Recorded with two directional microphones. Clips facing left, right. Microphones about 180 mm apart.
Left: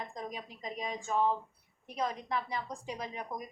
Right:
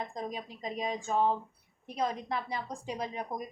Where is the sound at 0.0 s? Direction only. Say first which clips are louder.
Right 4 dB; 30° right (ahead or behind).